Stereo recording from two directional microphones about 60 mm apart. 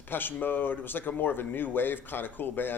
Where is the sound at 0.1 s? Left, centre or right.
Left.